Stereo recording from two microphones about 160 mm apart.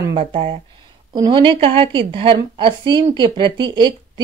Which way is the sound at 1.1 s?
30° right (ahead or behind).